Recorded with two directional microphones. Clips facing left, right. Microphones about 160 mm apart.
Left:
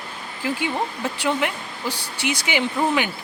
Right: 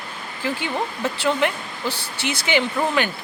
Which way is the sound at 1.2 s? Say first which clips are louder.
Right 2 dB; 10° left (ahead or behind).